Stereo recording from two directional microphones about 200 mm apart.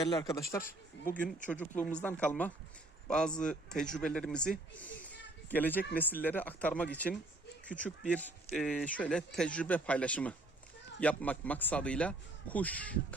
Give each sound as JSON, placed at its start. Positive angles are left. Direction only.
{"t": 0.0, "sound": "speech", "side_deg": 20}